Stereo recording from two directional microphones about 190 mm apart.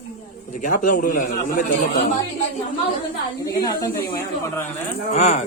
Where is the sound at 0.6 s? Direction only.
45° left (ahead or behind).